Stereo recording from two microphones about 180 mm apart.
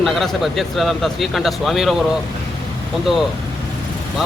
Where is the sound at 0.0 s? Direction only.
Centre (ahead or behind).